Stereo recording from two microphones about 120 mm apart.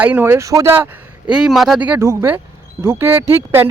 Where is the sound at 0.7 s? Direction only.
15° right (ahead or behind).